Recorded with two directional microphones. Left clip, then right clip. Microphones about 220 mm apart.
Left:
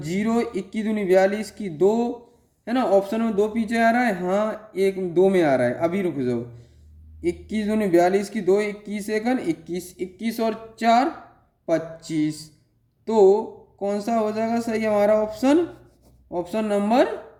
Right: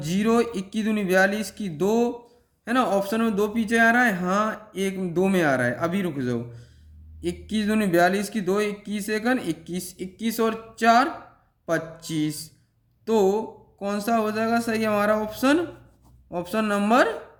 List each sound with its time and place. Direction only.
0.0 s a man's voice: 30° right (ahead or behind)
7.2 s a man's voice: 30° right (ahead or behind)